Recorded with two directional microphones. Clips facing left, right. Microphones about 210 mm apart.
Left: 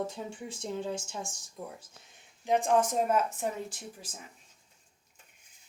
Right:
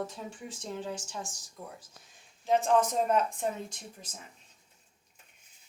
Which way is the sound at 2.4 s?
15° left (ahead or behind).